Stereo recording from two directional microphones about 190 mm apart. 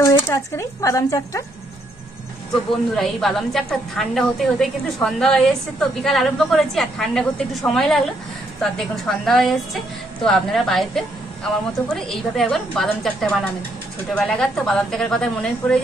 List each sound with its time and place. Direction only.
0.0 s speech: 15° left (ahead or behind)
3.0 s a woman's voice: centre (ahead or behind)